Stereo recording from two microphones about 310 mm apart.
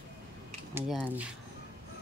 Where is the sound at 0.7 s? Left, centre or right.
Centre.